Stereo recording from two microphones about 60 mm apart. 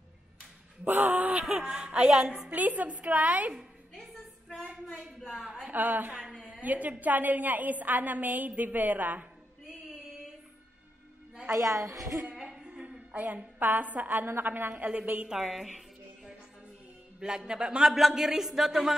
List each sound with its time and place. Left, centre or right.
0.8 s speech: right
1.4 s speech: centre
2.5 s a woman's voice: right
3.9 s a sound: centre
5.3 s speech: centre
5.7 s a woman's voice: right
11.6 s a woman's voice: right
12.4 s a sound: centre
13.1 s a woman's voice: right
14.7 s speech: centre
15.2 s a woman's voice: centre
17.2 s speech: centre